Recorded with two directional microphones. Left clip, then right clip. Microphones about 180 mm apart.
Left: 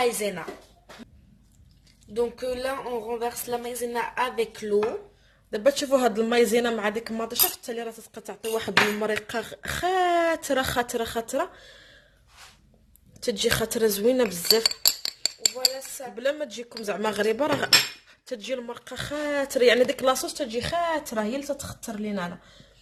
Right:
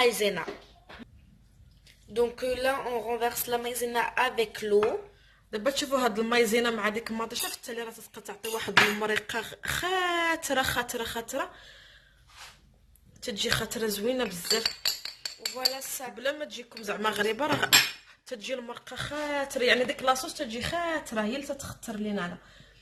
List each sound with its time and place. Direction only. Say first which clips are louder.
0.0 s speech: right 1 dB; centre (ahead or behind)
2.1 s speech: even; 5° right (ahead or behind)
5.5 s speech: left 6 dB; 45° left (ahead or behind)
13.1 s speech: left 5 dB; 45° left (ahead or behind)
16.1 s speech: left 5 dB; 40° left (ahead or behind)